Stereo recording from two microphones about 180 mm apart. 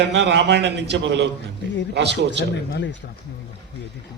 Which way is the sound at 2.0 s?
75° right (ahead or behind).